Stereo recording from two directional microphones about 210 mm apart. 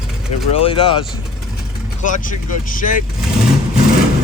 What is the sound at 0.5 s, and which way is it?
Speech, 25° left (ahead or behind).